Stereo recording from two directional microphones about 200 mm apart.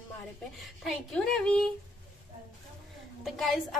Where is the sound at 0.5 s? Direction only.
Centre (ahead or behind).